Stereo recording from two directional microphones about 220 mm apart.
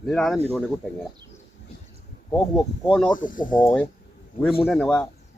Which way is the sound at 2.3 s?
5° left (ahead or behind).